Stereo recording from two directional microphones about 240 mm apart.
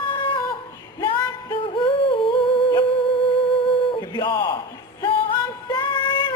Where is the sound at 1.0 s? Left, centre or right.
Left.